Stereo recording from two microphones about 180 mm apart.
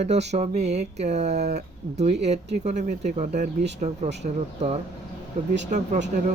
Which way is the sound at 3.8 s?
35° right (ahead or behind).